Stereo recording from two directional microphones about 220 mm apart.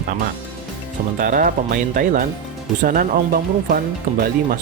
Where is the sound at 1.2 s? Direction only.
40° right (ahead or behind).